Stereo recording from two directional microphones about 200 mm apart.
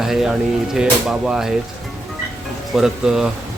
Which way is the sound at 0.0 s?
Centre (ahead or behind).